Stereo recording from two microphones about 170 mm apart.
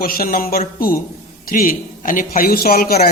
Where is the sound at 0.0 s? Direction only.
60° left (ahead or behind).